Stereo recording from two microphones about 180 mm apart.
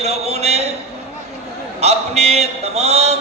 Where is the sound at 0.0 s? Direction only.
35° right (ahead or behind).